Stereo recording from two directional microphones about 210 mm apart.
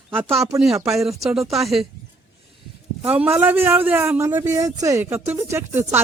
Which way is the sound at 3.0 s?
10° right (ahead or behind).